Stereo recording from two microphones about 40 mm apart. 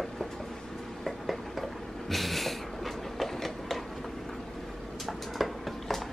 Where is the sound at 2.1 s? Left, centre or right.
Centre.